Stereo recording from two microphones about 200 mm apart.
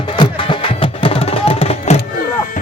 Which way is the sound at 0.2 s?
25° left (ahead or behind).